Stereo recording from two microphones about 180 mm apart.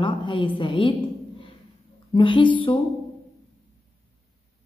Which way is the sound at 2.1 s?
25° left (ahead or behind).